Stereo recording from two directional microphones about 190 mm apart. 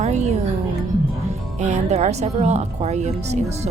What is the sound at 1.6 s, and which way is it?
Speech, 35° right (ahead or behind).